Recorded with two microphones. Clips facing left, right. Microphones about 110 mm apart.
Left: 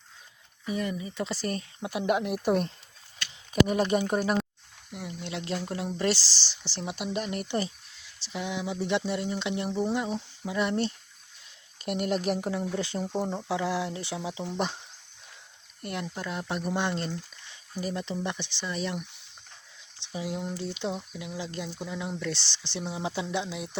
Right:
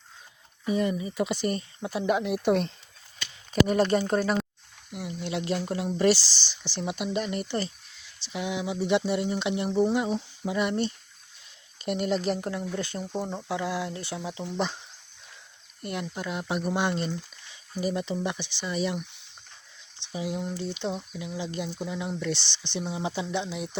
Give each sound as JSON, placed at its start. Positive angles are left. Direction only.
{"t": 0.6, "sound": "speech", "side_deg": -25}
{"t": 1.4, "sound": "speech", "side_deg": 0}
{"t": 1.9, "sound": "speech", "side_deg": 10}
{"t": 4.9, "sound": "speech", "side_deg": -5}
{"t": 6.1, "sound": "speech", "side_deg": 35}
{"t": 7.0, "sound": "speech", "side_deg": 0}
{"t": 8.2, "sound": "speech", "side_deg": -5}
{"t": 12.5, "sound": "speech", "side_deg": 25}
{"t": 13.1, "sound": "speech", "side_deg": 10}
{"t": 13.5, "sound": "speech", "side_deg": 30}
{"t": 14.2, "sound": "speech", "side_deg": 10}
{"t": 15.8, "sound": "speech", "side_deg": 0}
{"t": 20.1, "sound": "speech", "side_deg": 0}